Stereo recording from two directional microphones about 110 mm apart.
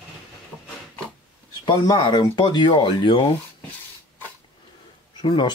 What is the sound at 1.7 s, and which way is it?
Speech, 45° left (ahead or behind).